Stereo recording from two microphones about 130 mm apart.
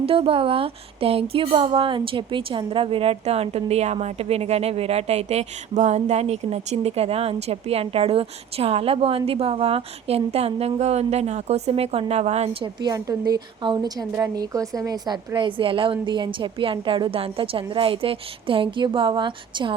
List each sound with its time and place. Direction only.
0.0 s speech: 45° right (ahead or behind)
12.6 s a woman's voice: 30° right (ahead or behind)